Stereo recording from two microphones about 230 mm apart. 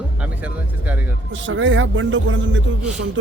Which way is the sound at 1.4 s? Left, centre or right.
Right.